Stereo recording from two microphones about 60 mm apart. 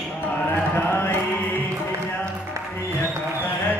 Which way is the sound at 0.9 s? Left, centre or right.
Left.